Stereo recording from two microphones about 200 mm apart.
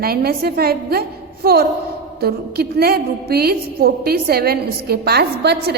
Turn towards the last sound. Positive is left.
turn(degrees=-55)  # may be behind; listen again after turning